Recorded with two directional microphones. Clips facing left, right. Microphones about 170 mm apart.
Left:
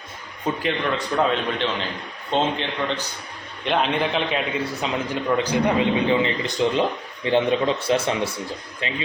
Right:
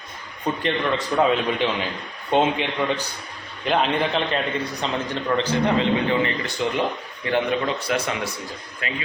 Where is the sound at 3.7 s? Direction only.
Centre (ahead or behind); by 9.0 s 25° left (ahead or behind).